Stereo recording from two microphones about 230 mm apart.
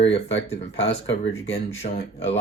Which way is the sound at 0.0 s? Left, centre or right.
Left.